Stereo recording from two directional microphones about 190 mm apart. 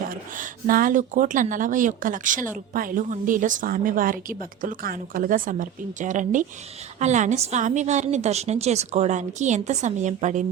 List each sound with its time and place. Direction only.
0.1 s a woman's voice: 45° right (ahead or behind)